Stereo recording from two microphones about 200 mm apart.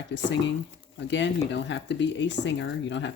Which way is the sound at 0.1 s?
65° left (ahead or behind).